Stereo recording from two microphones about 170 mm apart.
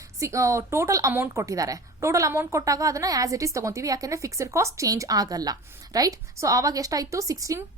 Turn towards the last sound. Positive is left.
turn(degrees=-20)  # may be behind; listen again after turning